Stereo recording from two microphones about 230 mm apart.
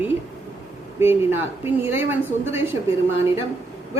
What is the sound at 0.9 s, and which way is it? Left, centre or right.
A woman's voice, centre.